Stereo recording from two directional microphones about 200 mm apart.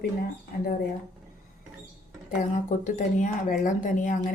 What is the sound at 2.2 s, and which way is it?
Speech, 40° left (ahead or behind).